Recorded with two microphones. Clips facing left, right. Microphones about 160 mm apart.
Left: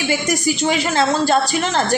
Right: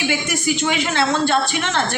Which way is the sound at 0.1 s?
40° left (ahead or behind).